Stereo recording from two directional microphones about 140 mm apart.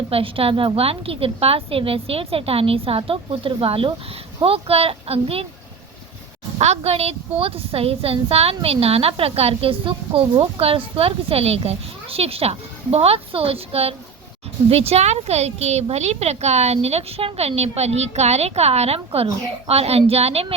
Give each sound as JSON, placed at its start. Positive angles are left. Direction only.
{"t": 0.1, "sound": "a woman's voice", "side_deg": -40}
{"t": 6.6, "sound": "a woman's voice", "side_deg": -50}